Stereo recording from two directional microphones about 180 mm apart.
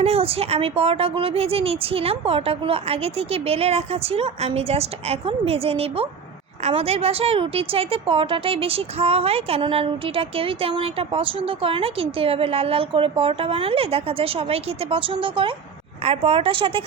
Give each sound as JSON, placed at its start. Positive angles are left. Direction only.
{"t": 0.0, "sound": "a woman's voice", "side_deg": -35}